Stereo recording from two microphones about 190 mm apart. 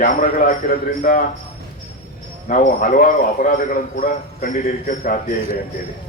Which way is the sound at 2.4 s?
45° left (ahead or behind).